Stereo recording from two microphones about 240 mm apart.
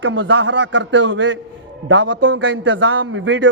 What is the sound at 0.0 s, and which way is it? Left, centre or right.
A man's voice, right.